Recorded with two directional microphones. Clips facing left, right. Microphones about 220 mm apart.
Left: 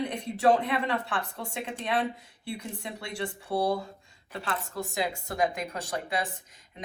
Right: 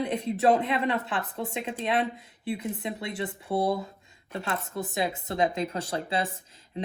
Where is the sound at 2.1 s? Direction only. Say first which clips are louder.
Right 5 dB; 25° left (ahead or behind).